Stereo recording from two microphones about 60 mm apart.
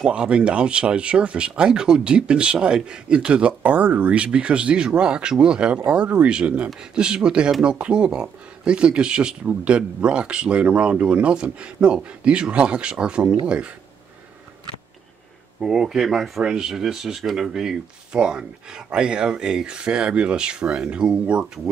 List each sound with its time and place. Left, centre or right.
0.0 s speech: centre
15.6 s speech: centre